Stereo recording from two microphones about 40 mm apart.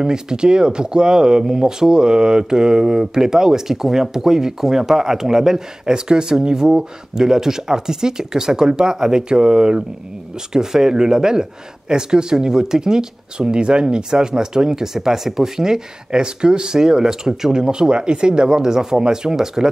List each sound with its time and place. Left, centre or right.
0.0 s speech: centre